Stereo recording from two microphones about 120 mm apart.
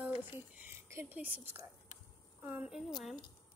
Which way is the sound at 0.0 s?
15° right (ahead or behind).